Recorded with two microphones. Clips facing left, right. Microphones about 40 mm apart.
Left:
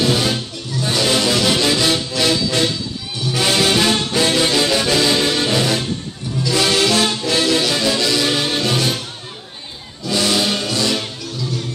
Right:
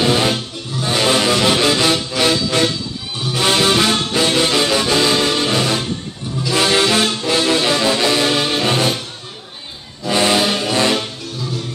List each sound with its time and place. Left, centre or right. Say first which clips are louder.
0.0 s music: right 2 dB; right
3.3 s music: right 1 dB; centre
6.5 s music: right 1 dB; right
8.3 s music: right 2 dB; centre
8.6 s music: right 3 dB; right
10.0 s music: right 3 dB; right
10.4 s music: right 2 dB; centre
10.7 s music: right 3 dB; right